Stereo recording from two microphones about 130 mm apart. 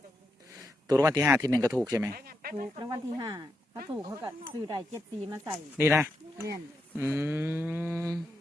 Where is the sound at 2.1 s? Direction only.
90° right.